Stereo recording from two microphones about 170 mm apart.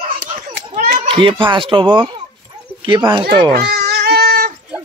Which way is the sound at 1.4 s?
30° right (ahead or behind).